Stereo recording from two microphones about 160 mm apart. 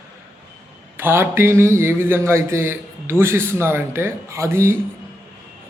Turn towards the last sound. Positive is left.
turn(degrees=-15)  # may be behind; listen again after turning